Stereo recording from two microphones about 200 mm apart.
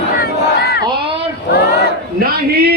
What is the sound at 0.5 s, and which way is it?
Battle cry, 55° left (ahead or behind).